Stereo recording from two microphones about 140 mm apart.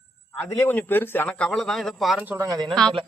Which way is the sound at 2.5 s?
30° right (ahead or behind).